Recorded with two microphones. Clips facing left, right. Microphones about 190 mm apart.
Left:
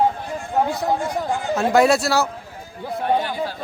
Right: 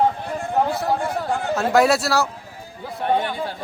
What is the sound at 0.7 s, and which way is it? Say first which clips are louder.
Speech: even; 15° left (ahead or behind).